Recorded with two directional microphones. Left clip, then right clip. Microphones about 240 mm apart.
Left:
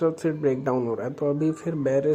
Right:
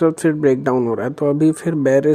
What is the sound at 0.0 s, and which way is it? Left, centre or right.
Speech, right.